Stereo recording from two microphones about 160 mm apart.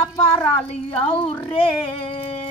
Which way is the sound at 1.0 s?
35° left (ahead or behind).